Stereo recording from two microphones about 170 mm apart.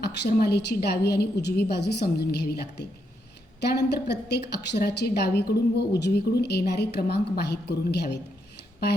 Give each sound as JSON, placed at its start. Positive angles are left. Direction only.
{"t": 0.0, "sound": "a woman's voice", "side_deg": 70}